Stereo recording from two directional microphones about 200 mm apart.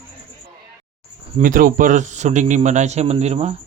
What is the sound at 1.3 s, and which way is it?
A man's voice, 40° right (ahead or behind).